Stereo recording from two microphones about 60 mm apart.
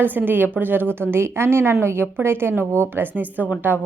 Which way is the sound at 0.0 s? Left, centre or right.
Right.